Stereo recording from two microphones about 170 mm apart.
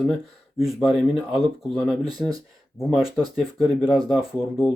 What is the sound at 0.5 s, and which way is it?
Speech, centre (ahead or behind).